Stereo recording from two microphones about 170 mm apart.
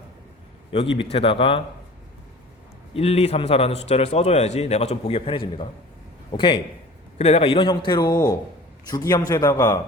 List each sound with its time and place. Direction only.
0.7 s a man's voice: 30° left (ahead or behind)
2.9 s a man's voice: 35° left (ahead or behind); by 9.8 s 20° left (ahead or behind)